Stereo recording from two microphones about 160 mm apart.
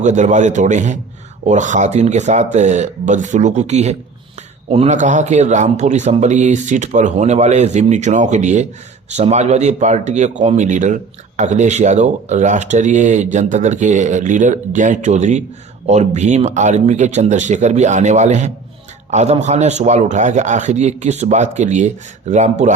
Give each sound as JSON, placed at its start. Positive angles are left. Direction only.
{"t": 0.0, "sound": "speech", "side_deg": -50}